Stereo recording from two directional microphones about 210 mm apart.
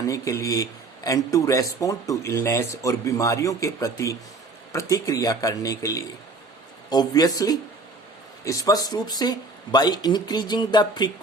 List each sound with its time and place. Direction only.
0.1 s speech: 15° left (ahead or behind)